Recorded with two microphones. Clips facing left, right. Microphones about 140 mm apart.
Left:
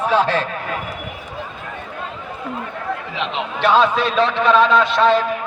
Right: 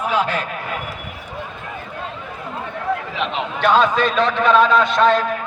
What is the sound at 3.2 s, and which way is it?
A man's voice, centre (ahead or behind).